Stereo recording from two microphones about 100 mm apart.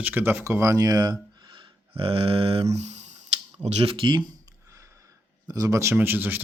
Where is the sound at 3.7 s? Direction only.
75° right (ahead or behind); by 4.2 s 60° right (ahead or behind).